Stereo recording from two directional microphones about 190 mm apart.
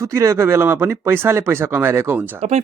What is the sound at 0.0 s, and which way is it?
Speech, 15° right (ahead or behind).